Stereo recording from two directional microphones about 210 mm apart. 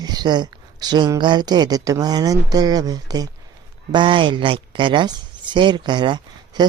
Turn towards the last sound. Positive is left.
turn(degrees=-20)  # may be behind; listen again after turning